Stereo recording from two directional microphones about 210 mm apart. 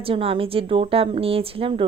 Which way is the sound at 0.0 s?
25° right (ahead or behind).